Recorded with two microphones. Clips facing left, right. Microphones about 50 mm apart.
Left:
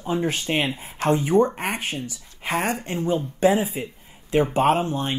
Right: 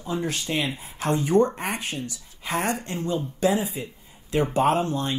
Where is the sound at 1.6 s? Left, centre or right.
Left.